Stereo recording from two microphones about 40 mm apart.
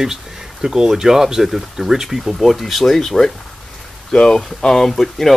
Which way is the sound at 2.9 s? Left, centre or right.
Centre.